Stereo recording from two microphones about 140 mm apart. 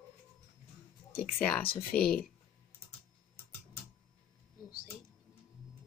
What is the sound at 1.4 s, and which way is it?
Speech, 10° left (ahead or behind).